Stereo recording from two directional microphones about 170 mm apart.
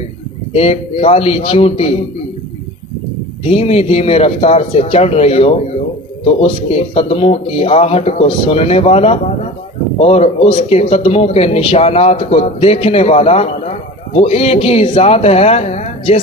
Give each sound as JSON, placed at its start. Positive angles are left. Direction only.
{"t": 0.5, "sound": "speech", "side_deg": 35}
{"t": 3.4, "sound": "speech", "side_deg": 35}